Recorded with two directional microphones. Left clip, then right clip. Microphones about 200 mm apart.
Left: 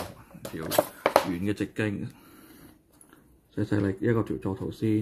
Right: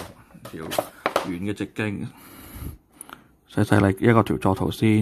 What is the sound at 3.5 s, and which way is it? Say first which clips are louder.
Speech: right 8 dB; 50° right (ahead or behind).